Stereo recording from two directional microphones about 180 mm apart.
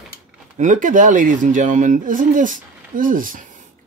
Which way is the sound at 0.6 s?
45° right (ahead or behind).